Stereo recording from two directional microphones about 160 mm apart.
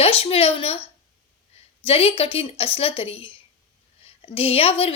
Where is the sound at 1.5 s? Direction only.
40° left (ahead or behind).